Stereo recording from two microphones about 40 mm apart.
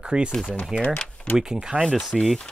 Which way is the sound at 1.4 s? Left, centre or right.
Centre.